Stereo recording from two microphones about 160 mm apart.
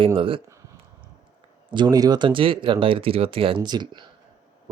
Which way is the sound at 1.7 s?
25° right (ahead or behind).